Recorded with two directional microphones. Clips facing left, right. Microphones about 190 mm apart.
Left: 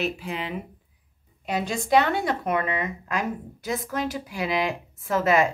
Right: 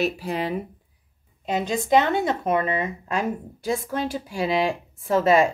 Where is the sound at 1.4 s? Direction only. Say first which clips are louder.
Right 3 dB; 20° right (ahead or behind).